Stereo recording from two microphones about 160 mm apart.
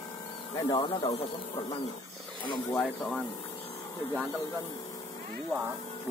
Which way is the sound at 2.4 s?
30° left (ahead or behind).